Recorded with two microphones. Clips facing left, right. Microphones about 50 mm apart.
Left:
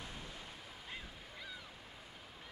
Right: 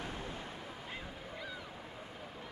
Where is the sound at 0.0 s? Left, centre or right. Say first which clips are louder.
Right 7 dB; right.